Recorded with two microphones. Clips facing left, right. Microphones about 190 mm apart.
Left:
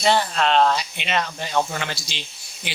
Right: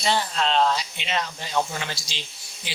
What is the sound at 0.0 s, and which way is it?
Speech, 60° left (ahead or behind).